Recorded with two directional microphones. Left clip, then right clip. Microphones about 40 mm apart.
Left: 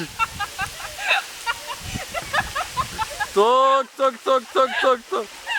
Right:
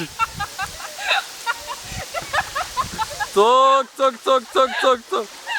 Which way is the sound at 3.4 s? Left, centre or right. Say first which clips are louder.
Right 2 dB; right.